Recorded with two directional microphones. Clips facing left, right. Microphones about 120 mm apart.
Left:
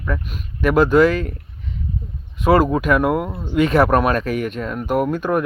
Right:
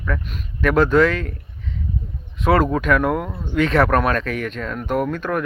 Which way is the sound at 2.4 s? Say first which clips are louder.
Left 2 dB; 5° left (ahead or behind).